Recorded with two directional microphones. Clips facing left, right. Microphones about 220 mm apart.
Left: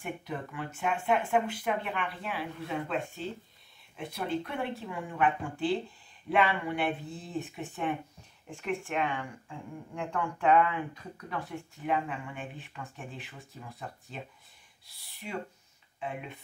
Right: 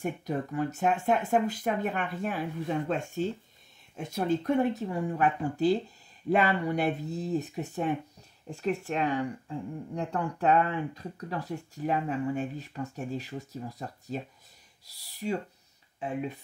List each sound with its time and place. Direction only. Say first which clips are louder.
0.0 s speech: right 6 dB; 40° right (ahead or behind)